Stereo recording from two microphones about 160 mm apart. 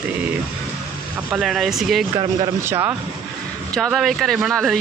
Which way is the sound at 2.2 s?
20° right (ahead or behind).